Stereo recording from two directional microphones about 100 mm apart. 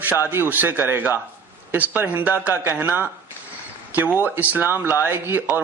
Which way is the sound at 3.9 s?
20° right (ahead or behind).